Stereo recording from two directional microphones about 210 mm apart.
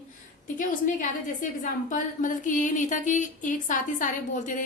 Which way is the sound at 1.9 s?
40° left (ahead or behind).